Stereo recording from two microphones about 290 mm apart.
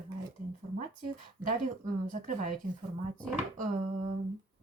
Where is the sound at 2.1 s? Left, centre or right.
Right.